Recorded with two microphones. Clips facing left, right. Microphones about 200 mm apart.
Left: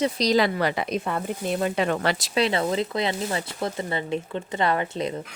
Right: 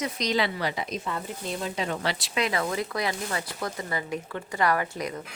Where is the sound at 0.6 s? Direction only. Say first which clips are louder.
Left 6 dB; 60° left (ahead or behind).